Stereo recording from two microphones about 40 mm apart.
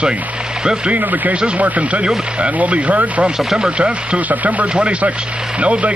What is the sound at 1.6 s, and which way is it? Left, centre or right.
Speech, right.